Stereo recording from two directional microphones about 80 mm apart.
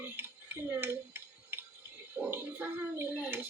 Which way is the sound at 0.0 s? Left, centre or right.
Right.